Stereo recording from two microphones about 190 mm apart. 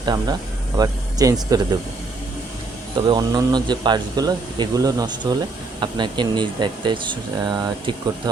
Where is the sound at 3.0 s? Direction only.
20° right (ahead or behind).